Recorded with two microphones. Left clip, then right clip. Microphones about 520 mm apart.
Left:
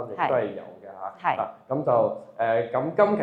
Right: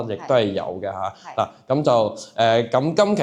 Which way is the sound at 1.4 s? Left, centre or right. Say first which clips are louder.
Right 7 dB; right.